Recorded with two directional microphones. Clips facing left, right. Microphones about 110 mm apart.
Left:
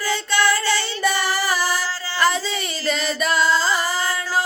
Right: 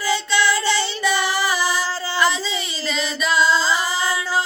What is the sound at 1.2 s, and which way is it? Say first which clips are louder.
Music: right 1 dB; 45° left (ahead or behind).